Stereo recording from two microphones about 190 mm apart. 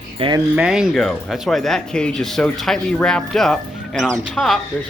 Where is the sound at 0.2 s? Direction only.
25° right (ahead or behind).